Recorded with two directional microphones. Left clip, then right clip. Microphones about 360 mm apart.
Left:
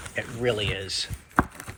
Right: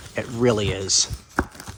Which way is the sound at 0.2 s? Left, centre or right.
Right.